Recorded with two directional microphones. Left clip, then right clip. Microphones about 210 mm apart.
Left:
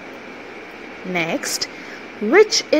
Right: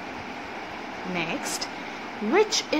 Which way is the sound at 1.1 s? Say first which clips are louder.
Left 8 dB; 25° left (ahead or behind).